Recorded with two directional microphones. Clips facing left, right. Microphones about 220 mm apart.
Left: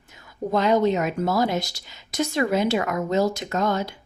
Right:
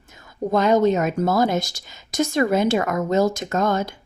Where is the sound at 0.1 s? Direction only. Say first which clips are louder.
Right 3 dB; 45° right (ahead or behind).